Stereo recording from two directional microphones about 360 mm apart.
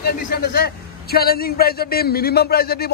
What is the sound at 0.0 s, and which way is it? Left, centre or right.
A man's voice, left.